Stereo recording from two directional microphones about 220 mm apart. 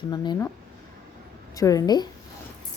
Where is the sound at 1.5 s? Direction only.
15° left (ahead or behind).